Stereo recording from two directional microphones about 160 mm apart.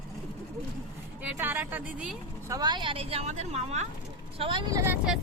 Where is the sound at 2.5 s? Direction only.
25° right (ahead or behind); by 3.9 s 45° right (ahead or behind).